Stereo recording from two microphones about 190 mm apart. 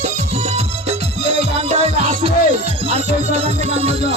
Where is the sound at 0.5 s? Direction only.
35° right (ahead or behind).